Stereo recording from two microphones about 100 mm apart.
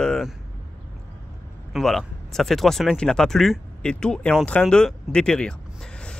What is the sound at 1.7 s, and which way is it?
Speech, 5° left (ahead or behind).